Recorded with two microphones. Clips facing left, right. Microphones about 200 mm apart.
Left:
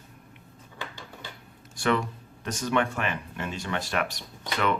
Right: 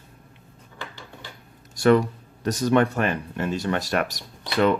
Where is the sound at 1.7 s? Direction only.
40° right (ahead or behind).